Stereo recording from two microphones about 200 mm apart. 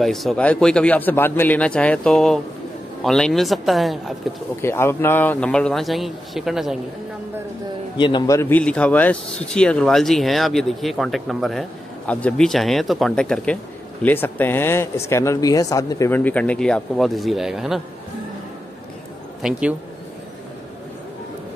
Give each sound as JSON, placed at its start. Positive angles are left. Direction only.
{"t": 0.0, "sound": "a man's voice", "side_deg": 0}
{"t": 4.6, "sound": "a man's voice", "side_deg": 10}
{"t": 8.0, "sound": "a man's voice", "side_deg": 20}